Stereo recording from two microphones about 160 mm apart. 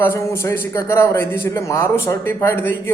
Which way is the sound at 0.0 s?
15° left (ahead or behind).